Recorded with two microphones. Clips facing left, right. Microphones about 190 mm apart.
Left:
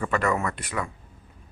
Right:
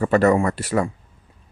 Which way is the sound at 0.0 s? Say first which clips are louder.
Right 9 dB; 40° right (ahead or behind).